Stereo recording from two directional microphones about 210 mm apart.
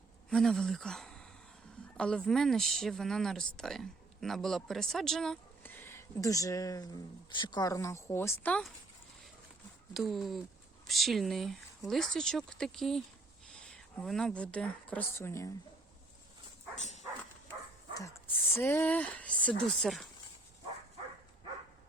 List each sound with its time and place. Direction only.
0.3 s speech: centre (ahead or behind)
9.9 s speech: centre (ahead or behind)
16.8 s dog: 35° left (ahead or behind)
18.5 s speech: 10° left (ahead or behind)